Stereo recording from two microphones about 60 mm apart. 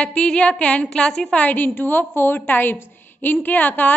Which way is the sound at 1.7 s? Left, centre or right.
Left.